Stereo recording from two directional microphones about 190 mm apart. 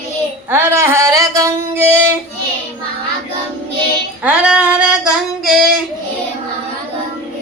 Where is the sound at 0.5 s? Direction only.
15° right (ahead or behind).